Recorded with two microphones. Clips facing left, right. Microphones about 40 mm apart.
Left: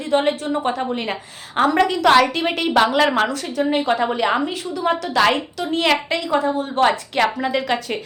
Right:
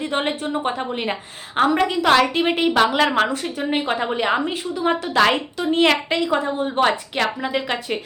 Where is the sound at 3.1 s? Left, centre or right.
Centre.